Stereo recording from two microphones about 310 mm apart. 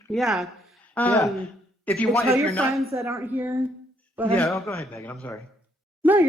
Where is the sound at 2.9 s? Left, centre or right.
Centre.